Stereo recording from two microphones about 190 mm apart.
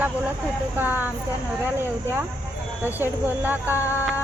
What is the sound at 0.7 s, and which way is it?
Speech, 10° right (ahead or behind).